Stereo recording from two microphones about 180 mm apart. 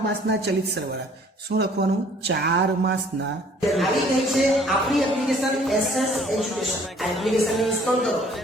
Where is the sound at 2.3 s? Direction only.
70° right (ahead or behind).